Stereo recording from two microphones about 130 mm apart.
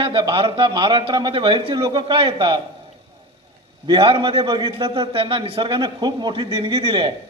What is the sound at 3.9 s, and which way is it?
A man's voice, 40° right (ahead or behind).